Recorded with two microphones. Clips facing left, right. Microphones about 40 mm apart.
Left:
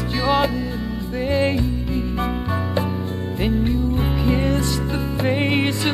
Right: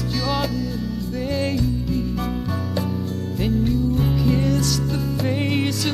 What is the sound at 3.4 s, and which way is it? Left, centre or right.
Music, left.